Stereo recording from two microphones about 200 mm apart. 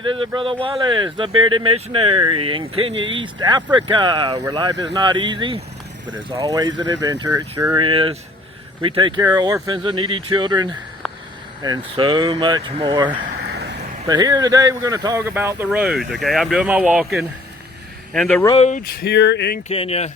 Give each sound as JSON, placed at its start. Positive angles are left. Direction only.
{"t": 0.0, "sound": "speech", "side_deg": -25}
{"t": 14.1, "sound": "speech", "side_deg": -20}
{"t": 18.5, "sound": "speech", "side_deg": 30}
{"t": 18.8, "sound": "speech", "side_deg": 50}
{"t": 19.6, "sound": "speech", "side_deg": 30}